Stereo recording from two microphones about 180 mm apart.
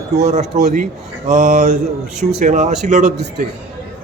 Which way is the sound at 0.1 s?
40° right (ahead or behind).